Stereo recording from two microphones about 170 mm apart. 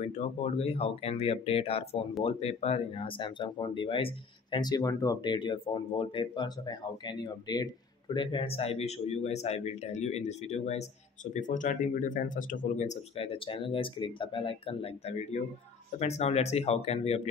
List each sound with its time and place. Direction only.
0.0 s speech: 40° left (ahead or behind)